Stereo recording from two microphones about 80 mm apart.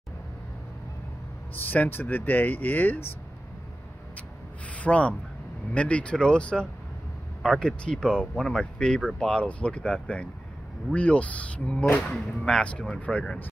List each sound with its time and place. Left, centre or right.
1.5 s speech: left
4.7 s speech: centre